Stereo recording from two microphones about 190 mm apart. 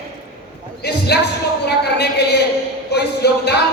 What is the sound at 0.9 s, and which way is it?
Basketball bounce, 60° left (ahead or behind).